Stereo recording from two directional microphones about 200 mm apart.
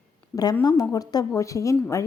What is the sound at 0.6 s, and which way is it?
A woman's voice, 20° left (ahead or behind).